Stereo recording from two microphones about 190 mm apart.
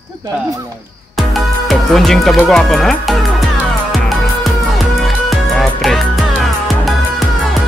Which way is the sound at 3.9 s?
Centre (ahead or behind).